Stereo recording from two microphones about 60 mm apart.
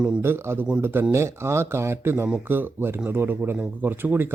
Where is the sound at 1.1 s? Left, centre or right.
Right.